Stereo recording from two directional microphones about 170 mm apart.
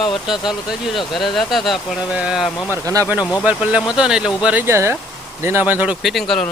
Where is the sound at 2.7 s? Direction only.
20° right (ahead or behind); by 6.4 s centre (ahead or behind).